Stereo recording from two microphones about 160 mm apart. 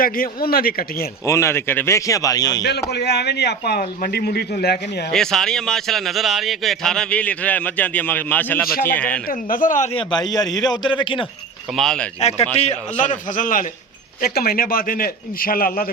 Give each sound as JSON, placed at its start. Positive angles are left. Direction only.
{"t": 0.0, "sound": "speech", "side_deg": 65}
{"t": 1.2, "sound": "a man's voice", "side_deg": 15}
{"t": 2.9, "sound": "speech", "side_deg": 90}
{"t": 5.1, "sound": "a man's voice", "side_deg": 5}
{"t": 9.2, "sound": "a man's voice", "side_deg": 60}
{"t": 9.9, "sound": "a man's voice", "side_deg": 30}
{"t": 11.8, "sound": "a man's voice", "side_deg": 5}
{"t": 12.2, "sound": "a man's voice", "side_deg": 40}
{"t": 14.2, "sound": "a man's voice", "side_deg": 75}